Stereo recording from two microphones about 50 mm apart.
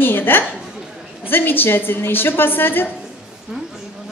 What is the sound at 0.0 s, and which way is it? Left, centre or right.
A woman's voice, left.